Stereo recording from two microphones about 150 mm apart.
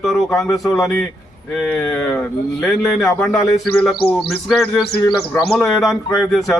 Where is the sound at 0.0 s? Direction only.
Centre (ahead or behind).